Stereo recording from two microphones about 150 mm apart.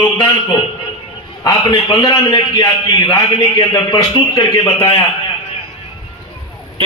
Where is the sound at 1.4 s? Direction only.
25° left (ahead or behind).